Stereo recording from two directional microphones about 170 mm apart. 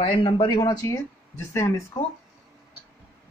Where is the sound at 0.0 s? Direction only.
30° left (ahead or behind).